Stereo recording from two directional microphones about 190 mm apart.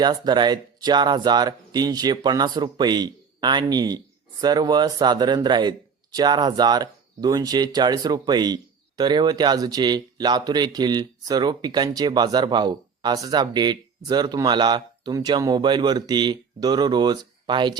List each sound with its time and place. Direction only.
0.0 s speech: 20° right (ahead or behind)